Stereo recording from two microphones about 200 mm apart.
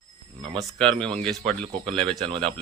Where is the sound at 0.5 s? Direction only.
5° left (ahead or behind).